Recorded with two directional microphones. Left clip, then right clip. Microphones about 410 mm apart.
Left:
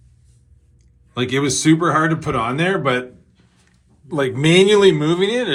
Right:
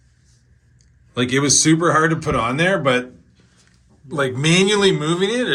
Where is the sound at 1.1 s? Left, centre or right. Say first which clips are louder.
Right 2 dB; centre.